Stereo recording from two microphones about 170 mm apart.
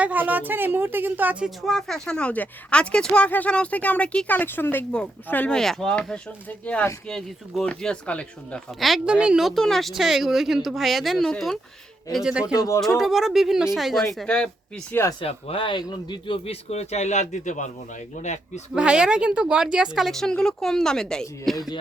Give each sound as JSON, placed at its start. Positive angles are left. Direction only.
{"t": 0.0, "sound": "speech", "side_deg": -10}
{"t": 12.5, "sound": "speech", "side_deg": 20}
{"t": 12.8, "sound": "speech", "side_deg": 0}
{"t": 15.2, "sound": "speech", "side_deg": 35}
{"t": 18.7, "sound": "speech", "side_deg": -5}